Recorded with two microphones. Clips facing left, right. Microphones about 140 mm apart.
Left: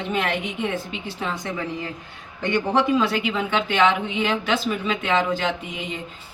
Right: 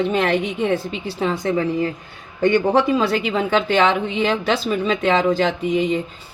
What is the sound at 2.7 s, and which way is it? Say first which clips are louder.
A woman's voice: right 3 dB; 40° right (ahead or behind).